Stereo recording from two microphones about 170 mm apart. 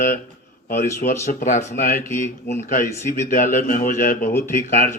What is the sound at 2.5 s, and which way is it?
Speech, 15° left (ahead or behind).